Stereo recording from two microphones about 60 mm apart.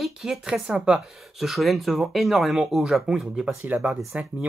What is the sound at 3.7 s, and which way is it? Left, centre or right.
Speech, right.